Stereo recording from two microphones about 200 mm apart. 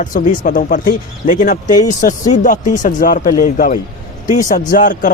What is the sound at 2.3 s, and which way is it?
Speech, 40° left (ahead or behind).